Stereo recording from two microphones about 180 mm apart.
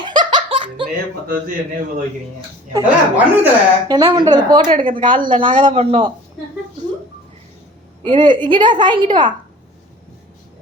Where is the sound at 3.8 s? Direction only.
20° right (ahead or behind).